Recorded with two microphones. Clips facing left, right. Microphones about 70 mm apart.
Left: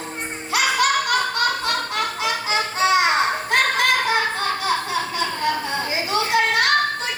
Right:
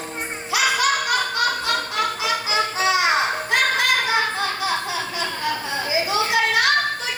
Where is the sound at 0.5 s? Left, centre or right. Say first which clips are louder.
Left 1 dB; left.